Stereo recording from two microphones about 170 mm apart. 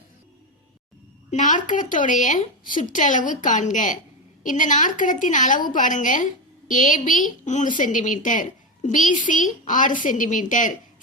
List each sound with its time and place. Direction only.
1.3 s a woman's voice: 50° left (ahead or behind)